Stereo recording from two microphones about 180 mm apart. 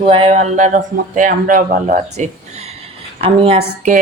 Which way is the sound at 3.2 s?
30° right (ahead or behind).